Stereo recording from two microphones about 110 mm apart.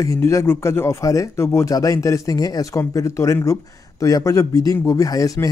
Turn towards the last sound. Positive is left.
turn(degrees=35)  # may be behind; listen again after turning